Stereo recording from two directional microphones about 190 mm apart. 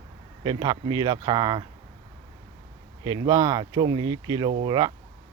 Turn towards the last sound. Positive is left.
turn(degrees=-25)  # may be behind; listen again after turning